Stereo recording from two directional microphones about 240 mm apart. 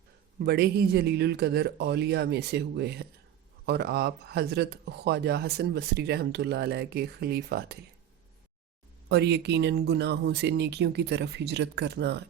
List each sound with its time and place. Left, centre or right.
0.3 s speech: right
9.0 s speech: right